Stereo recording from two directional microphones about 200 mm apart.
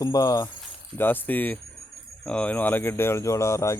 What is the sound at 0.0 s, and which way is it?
Speech, 15° left (ahead or behind).